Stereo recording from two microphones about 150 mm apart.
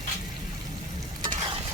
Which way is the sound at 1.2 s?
60° right (ahead or behind).